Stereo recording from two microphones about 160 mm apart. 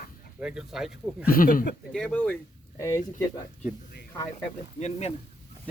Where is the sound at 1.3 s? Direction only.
60° left (ahead or behind).